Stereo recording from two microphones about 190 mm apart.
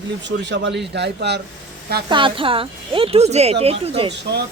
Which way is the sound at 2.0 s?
25° right (ahead or behind).